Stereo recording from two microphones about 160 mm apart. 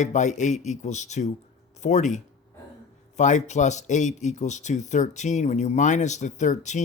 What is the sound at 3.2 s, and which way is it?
Speech, 50° left (ahead or behind).